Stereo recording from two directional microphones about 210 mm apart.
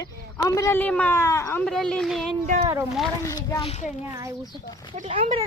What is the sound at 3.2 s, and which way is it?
Speech, 15° left (ahead or behind).